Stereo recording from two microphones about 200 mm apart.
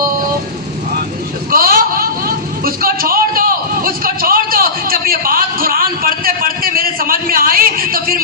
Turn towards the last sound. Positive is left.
turn(degrees=-45)  # may be behind; listen again after turning